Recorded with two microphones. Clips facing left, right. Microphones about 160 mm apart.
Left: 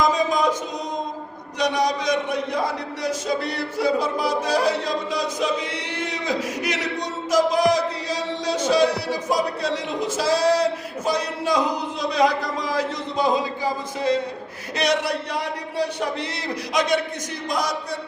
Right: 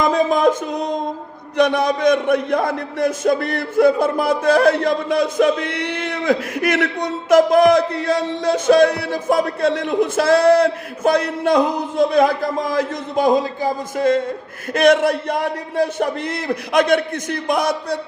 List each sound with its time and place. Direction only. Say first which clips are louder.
0.0 s music: right 5 dB; 60° right (ahead or behind)
1.5 s a man's voice: right 6 dB; 55° right (ahead or behind)